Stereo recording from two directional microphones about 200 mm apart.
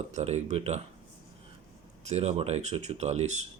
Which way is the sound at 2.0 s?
35° right (ahead or behind).